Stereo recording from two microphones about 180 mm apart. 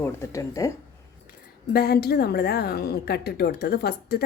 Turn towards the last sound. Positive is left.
turn(degrees=60)  # may be behind; listen again after turning